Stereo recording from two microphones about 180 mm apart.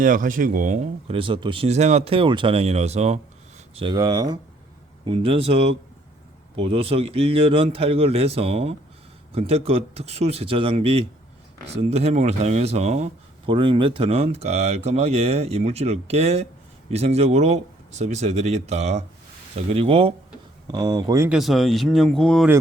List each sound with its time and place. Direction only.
0.0 s speech: 50° right (ahead or behind)
1.1 s speech: 30° right (ahead or behind)
3.8 s speech: 25° right (ahead or behind)
20.7 s speech: 20° right (ahead or behind)
21.2 s speech: centre (ahead or behind)